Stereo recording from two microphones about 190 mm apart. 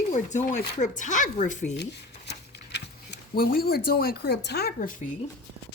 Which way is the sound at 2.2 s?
65° left (ahead or behind).